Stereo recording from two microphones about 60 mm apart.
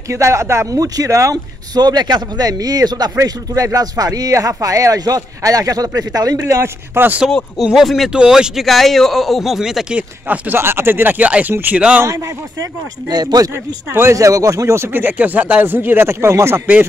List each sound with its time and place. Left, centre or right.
0.1 s speech: right
0.7 s speech: right
1.7 s speech: right
6.4 s speech: right
7.0 s speech: right
7.7 s speech: centre
8.1 s speech: centre
8.6 s speech: centre
9.9 s speech: right
13.2 s speech: right
14.1 s speech: right
14.9 s speech: right